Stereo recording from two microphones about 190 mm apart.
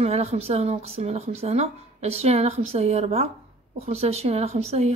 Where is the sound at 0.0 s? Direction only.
35° right (ahead or behind).